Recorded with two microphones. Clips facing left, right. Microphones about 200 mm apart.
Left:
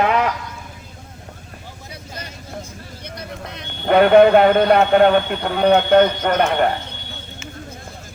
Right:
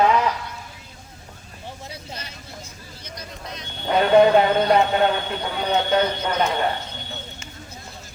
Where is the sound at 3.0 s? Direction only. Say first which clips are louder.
Left 4 dB; 60° left (ahead or behind).